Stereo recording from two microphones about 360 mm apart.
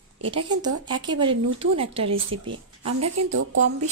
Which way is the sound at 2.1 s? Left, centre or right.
Right.